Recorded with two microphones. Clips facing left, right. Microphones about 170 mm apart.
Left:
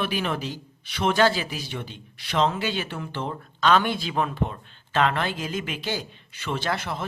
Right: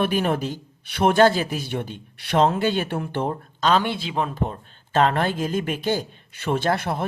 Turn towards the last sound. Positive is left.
turn(degrees=-55)  # may be behind; listen again after turning